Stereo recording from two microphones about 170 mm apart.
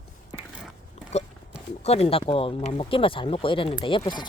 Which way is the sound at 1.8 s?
35° left (ahead or behind).